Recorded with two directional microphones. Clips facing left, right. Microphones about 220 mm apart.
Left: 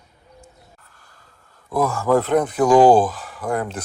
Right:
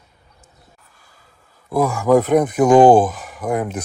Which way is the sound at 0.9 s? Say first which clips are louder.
Even; 10° right (ahead or behind).